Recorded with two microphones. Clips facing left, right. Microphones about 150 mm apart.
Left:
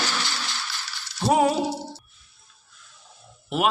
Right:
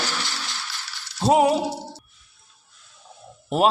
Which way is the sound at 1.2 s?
20° right (ahead or behind).